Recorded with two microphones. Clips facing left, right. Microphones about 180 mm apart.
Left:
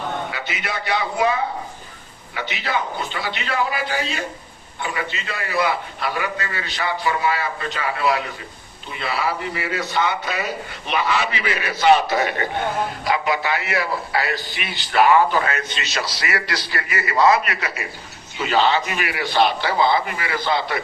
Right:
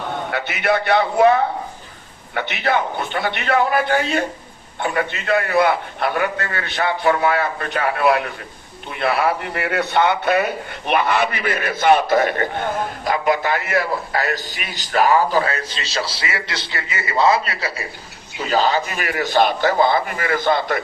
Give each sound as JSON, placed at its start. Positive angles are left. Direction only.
{"t": 0.3, "sound": "a man's voice", "side_deg": -60}